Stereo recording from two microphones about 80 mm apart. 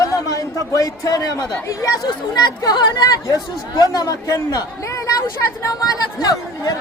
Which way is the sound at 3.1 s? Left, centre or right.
Left.